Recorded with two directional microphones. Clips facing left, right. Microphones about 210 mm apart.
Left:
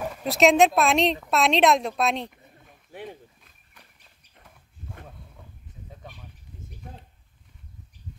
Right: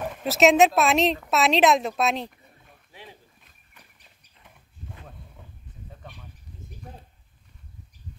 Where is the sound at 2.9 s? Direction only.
55° left (ahead or behind).